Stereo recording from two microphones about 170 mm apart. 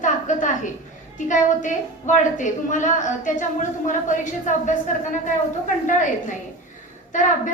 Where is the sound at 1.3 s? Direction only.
50° left (ahead or behind).